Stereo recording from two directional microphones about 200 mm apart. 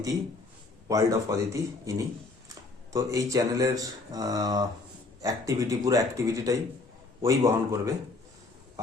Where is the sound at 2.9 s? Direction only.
15° right (ahead or behind).